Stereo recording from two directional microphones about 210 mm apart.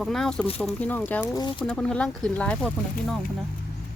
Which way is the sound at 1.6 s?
5° left (ahead or behind).